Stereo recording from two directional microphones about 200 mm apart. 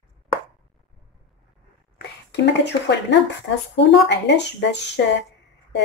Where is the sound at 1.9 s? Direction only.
60° left (ahead or behind).